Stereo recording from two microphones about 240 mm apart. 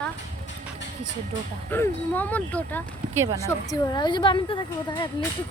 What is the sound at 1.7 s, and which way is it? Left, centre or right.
A woman's voice, centre.